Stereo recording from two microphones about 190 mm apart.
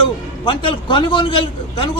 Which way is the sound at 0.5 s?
25° left (ahead or behind).